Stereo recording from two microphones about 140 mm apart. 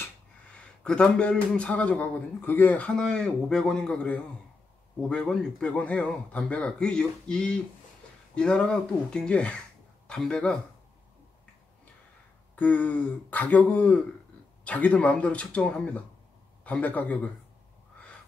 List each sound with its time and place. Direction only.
0.8 s a man's voice: 5° left (ahead or behind)
12.5 s a man's voice: 10° left (ahead or behind)